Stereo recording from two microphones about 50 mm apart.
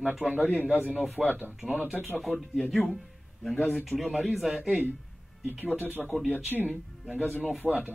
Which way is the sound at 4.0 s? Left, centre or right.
Centre.